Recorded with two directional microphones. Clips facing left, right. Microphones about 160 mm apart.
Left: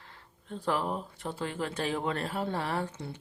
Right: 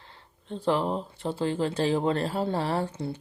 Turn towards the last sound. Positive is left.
turn(degrees=-30)  # may be behind; listen again after turning